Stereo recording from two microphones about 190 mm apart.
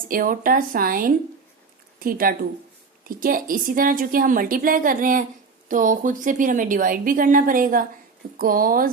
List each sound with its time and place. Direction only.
0.1 s a woman's voice: 45° right (ahead or behind)